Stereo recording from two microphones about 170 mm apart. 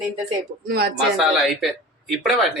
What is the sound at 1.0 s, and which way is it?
Speech, centre (ahead or behind).